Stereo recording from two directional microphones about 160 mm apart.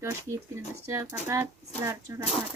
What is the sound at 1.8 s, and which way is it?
Speech, 20° right (ahead or behind).